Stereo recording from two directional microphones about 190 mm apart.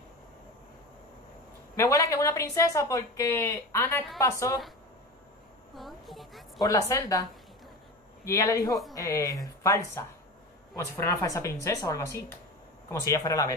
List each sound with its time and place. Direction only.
1.8 s a woman's voice: 15° left (ahead or behind)
5.8 s a sound: centre (ahead or behind)
6.6 s a woman's voice: 15° left (ahead or behind)
8.3 s a woman's voice: 15° left (ahead or behind)